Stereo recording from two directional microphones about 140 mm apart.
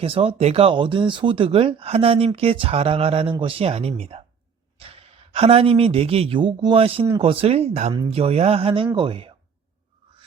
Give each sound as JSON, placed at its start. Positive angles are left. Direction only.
{"t": 0.0, "sound": "speech", "side_deg": -40}